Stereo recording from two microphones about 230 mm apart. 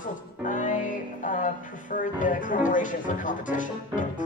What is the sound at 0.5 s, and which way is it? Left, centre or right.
Music, left.